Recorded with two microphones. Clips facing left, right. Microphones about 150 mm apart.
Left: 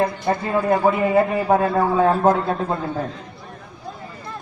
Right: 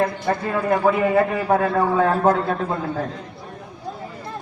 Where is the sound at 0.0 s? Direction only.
20° left (ahead or behind).